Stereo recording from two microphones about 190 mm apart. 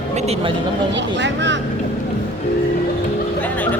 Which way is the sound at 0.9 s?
70° right (ahead or behind).